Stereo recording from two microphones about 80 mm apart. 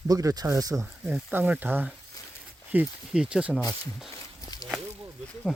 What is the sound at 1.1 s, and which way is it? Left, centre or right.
Speech, right.